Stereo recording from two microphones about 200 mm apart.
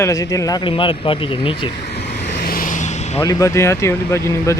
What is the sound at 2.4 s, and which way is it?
Vehicle, 45° left (ahead or behind).